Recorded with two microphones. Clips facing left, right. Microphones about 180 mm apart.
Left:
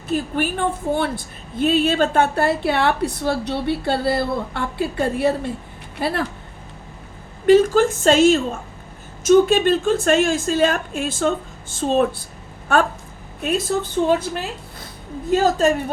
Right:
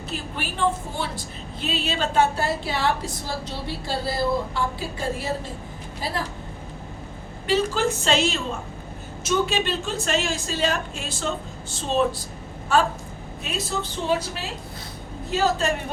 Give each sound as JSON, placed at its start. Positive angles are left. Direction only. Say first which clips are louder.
{"t": 0.1, "sound": "a woman's voice", "louder": "left 12 dB", "side_deg": 50}
{"t": 7.4, "sound": "a woman's voice", "louder": "left 9 dB", "side_deg": 50}